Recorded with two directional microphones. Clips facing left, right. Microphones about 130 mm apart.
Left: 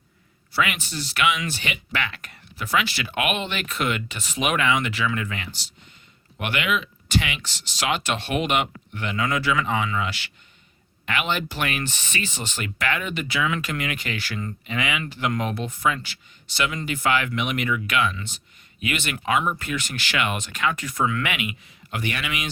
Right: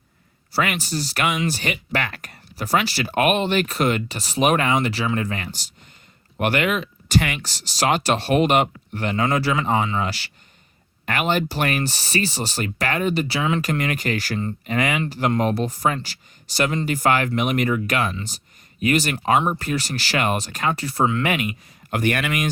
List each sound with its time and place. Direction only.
0.5 s speech: 40° right (ahead or behind)